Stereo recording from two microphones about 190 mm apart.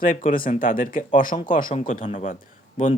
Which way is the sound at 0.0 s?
45° left (ahead or behind).